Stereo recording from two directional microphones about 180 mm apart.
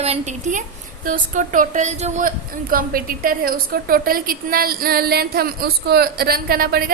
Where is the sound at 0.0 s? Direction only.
40° right (ahead or behind).